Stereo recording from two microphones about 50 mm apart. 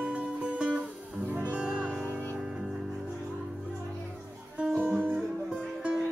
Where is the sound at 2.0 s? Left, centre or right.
Left.